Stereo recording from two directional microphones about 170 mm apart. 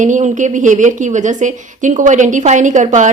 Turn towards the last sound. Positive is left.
turn(degrees=-45)  # may be behind; listen again after turning